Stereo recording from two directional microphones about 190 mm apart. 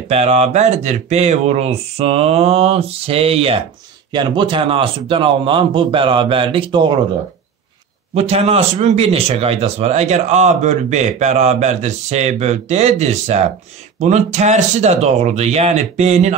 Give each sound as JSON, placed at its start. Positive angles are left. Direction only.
{"t": 0.1, "sound": "speech", "side_deg": -35}
{"t": 8.1, "sound": "speech", "side_deg": -35}